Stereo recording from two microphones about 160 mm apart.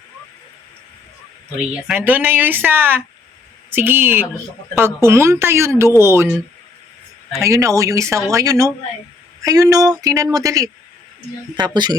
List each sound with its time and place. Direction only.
1.9 s speech: 10° right (ahead or behind)
7.4 s speech: 20° right (ahead or behind)